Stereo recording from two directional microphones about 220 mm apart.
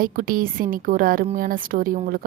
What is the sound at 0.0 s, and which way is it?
A woman's voice, 40° right (ahead or behind).